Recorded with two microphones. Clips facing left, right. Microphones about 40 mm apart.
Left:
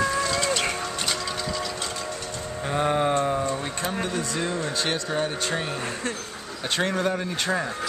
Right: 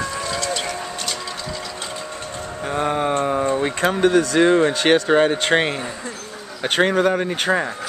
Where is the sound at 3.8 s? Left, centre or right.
Right.